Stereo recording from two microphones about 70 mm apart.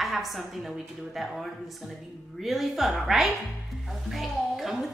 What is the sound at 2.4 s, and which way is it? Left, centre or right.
A woman's voice, centre.